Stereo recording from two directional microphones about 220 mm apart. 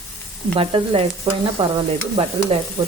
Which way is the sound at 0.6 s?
25° right (ahead or behind).